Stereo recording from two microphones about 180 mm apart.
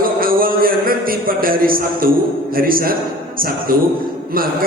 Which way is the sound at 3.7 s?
55° right (ahead or behind).